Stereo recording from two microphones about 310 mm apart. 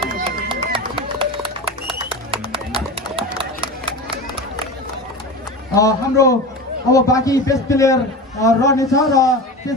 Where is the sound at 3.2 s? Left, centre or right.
Centre.